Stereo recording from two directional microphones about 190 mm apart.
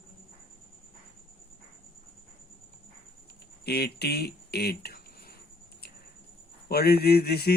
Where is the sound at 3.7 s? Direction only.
60° left (ahead or behind).